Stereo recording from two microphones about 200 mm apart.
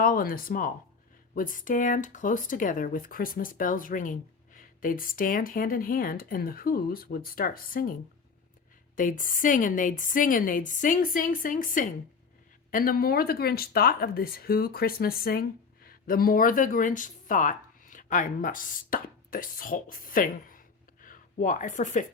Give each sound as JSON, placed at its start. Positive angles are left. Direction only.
{"t": 0.0, "sound": "speech", "side_deg": 45}
{"t": 9.0, "sound": "a woman's voice", "side_deg": 40}